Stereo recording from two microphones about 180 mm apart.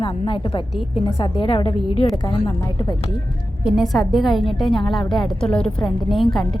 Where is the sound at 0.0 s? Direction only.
30° left (ahead or behind).